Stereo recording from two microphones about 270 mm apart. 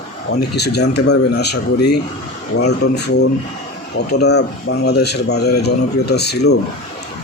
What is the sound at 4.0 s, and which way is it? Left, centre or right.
A man's voice, left.